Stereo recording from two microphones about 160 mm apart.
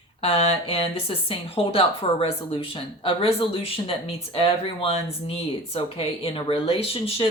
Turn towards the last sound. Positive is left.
turn(degrees=35)  # may be behind; listen again after turning